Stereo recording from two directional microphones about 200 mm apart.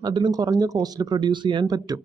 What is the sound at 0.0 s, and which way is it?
Speech, 20° right (ahead or behind).